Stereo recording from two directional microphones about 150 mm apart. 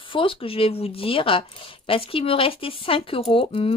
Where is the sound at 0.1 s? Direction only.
35° left (ahead or behind).